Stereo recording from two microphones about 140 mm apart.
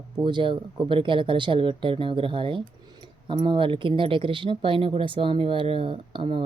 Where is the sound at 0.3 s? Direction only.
35° right (ahead or behind).